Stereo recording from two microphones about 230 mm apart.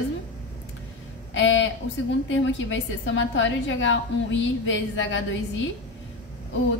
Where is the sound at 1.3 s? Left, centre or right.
Left.